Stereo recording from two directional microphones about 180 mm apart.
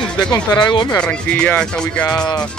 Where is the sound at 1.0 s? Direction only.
5° left (ahead or behind).